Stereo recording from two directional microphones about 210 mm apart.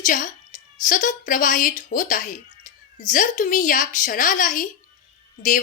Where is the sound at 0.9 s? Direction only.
40° left (ahead or behind).